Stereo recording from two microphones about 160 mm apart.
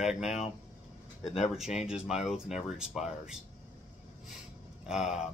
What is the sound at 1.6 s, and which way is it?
Speech, 5° right (ahead or behind).